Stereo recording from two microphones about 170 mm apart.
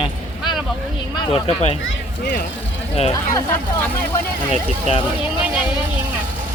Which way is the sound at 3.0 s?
25° left (ahead or behind).